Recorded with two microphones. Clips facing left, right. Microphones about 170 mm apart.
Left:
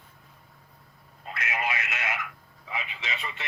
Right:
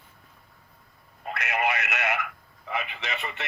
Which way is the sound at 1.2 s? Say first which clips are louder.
Right 4 dB; 60° right (ahead or behind).